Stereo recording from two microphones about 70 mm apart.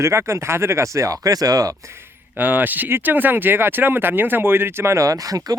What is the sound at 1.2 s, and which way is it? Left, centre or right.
Speech, right.